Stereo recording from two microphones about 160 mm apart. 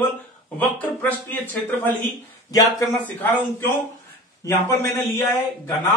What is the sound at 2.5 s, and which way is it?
Speech, 20° left (ahead or behind).